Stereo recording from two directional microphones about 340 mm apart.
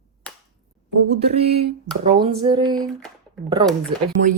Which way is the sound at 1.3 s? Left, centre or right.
Centre.